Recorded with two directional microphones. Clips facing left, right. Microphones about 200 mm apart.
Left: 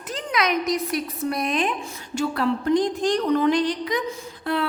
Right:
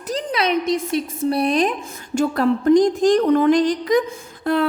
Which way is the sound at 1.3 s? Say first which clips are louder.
Right 7 dB; 35° right (ahead or behind).